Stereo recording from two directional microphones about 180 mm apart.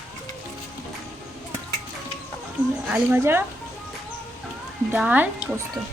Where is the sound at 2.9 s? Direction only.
10° right (ahead or behind).